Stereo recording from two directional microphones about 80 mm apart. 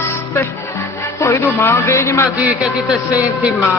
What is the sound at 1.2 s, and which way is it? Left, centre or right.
A man's voice, left.